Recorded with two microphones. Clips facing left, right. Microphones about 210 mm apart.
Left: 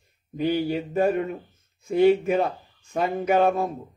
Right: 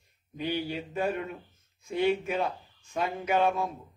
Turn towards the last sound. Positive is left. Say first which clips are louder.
# left 6 dB
turn(degrees=45)  # may be behind; listen again after turning